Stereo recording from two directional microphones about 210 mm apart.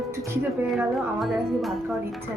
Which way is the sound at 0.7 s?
Centre (ahead or behind).